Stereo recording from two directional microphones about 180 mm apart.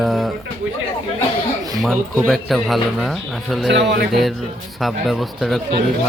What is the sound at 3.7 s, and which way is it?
Speech, 65° right (ahead or behind).